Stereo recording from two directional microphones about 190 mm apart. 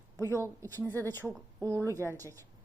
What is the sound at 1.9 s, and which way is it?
Speech, 10° left (ahead or behind).